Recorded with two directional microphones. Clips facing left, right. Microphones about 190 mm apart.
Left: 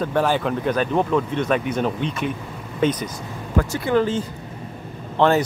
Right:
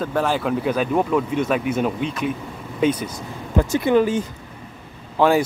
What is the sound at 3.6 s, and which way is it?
Speech, 20° right (ahead or behind).